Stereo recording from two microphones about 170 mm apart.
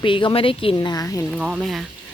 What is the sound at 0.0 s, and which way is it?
Speech, 30° left (ahead or behind).